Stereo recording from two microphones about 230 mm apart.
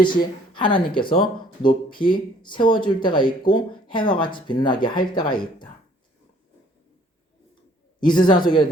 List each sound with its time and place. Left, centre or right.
0.5 s speech: left
8.0 s speech: centre